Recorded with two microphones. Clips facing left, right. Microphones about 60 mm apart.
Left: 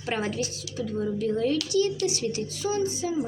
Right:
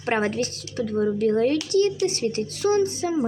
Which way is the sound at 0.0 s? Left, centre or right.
Right.